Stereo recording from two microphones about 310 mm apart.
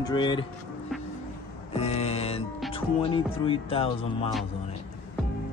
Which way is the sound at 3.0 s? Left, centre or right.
Centre.